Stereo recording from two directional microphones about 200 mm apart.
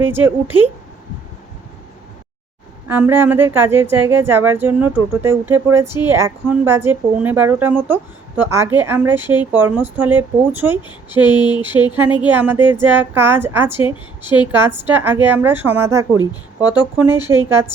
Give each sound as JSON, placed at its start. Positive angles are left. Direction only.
{"t": 0.0, "sound": "speech", "side_deg": -10}
{"t": 2.8, "sound": "speech", "side_deg": -10}
{"t": 10.8, "sound": "a sound", "side_deg": 20}
{"t": 12.3, "sound": "speech", "side_deg": -10}